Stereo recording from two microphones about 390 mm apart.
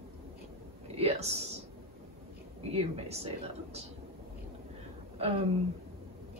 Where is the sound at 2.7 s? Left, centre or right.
Centre.